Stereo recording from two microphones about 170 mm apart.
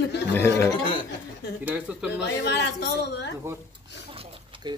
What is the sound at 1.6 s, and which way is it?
Speech, 10° right (ahead or behind).